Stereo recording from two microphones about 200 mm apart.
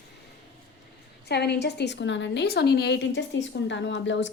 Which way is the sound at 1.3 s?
55° left (ahead or behind).